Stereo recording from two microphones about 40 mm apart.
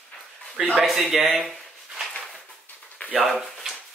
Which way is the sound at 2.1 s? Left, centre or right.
Left.